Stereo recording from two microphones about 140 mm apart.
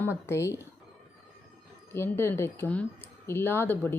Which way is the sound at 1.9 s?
15° left (ahead or behind).